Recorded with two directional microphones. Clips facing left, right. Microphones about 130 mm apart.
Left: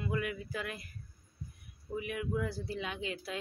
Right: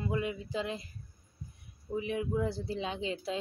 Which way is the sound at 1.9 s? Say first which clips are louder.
Right 3 dB; 25° right (ahead or behind).